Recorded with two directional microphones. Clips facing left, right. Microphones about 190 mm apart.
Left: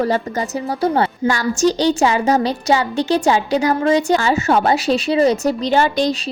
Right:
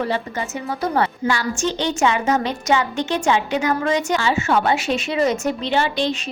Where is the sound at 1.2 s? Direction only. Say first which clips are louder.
Left 5 dB; 40° left (ahead or behind).